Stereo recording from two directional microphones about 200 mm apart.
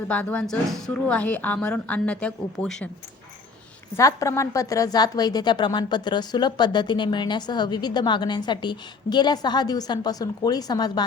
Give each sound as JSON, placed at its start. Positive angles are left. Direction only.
{"t": 0.1, "sound": "a woman's voice", "side_deg": 5}
{"t": 3.9, "sound": "a woman's voice", "side_deg": 15}